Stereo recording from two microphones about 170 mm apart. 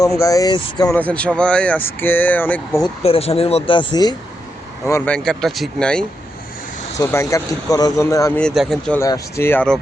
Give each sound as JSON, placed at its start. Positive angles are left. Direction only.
{"t": 0.2, "sound": "speech", "side_deg": 20}
{"t": 0.9, "sound": "speech", "side_deg": 10}
{"t": 3.0, "sound": "speech", "side_deg": 35}
{"t": 5.1, "sound": "speech", "side_deg": 5}
{"t": 7.0, "sound": "speech", "side_deg": 15}
{"t": 8.4, "sound": "speech", "side_deg": 5}
{"t": 9.0, "sound": "speech", "side_deg": 20}